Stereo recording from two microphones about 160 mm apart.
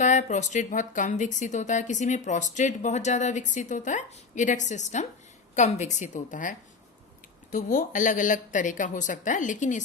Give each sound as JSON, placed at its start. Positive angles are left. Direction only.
{"t": 0.0, "sound": "speech", "side_deg": 50}